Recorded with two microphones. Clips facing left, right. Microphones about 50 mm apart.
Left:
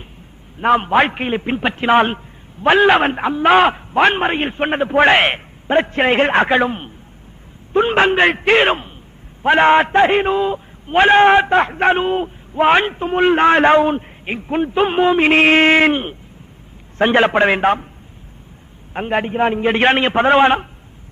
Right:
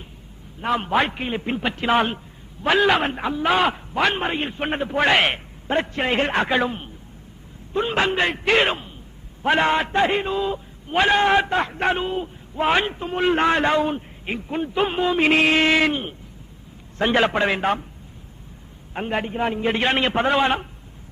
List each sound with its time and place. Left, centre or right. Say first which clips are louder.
0.6 s a man's voice: left 7 dB; left
1.4 s a man's voice: left 5 dB; left
3.4 s a man's voice: left 8 dB; left
3.7 s a man's voice: left 7 dB; left
18.9 s a man's voice: left 6 dB; left